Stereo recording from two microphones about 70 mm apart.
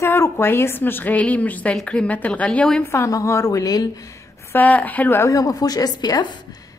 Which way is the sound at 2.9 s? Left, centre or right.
Left.